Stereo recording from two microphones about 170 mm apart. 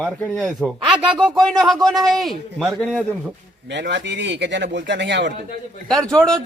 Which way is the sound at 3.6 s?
90° right.